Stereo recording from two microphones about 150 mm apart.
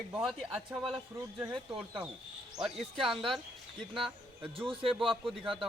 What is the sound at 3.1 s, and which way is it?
Speech, centre (ahead or behind).